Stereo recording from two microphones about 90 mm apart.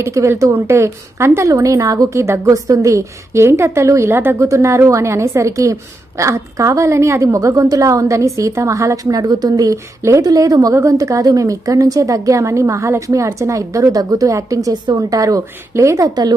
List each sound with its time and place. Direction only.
0.0 s a woman's voice: 35° right (ahead or behind)